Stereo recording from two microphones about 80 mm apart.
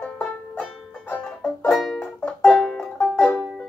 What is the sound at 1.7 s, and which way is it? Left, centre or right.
Music, centre.